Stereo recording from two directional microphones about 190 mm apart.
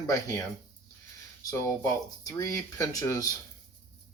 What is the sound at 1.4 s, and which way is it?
Speech, 20° left (ahead or behind).